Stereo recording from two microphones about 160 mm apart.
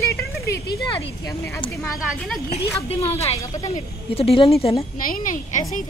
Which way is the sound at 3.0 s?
40° left (ahead or behind).